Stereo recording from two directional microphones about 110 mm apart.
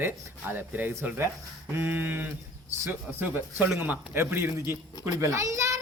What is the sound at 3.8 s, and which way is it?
A man's voice, 20° right (ahead or behind).